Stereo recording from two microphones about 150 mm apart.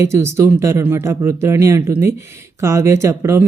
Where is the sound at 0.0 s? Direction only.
20° right (ahead or behind).